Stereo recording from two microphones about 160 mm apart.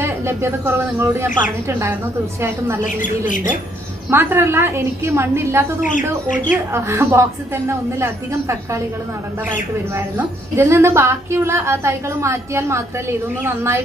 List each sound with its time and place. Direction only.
0.0 s a woman's voice: 15° right (ahead or behind)
2.8 s speech: 55° left (ahead or behind)
4.1 s a woman's voice: 15° right (ahead or behind)
5.9 s speech: 55° left (ahead or behind)
6.7 s a woman's voice: 15° right (ahead or behind)
9.9 s a woman's voice: 15° right (ahead or behind)